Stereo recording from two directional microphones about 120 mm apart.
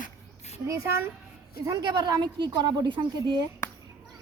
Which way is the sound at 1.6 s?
35° right (ahead or behind).